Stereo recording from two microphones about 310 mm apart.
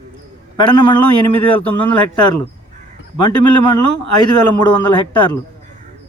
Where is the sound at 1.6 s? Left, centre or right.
Centre.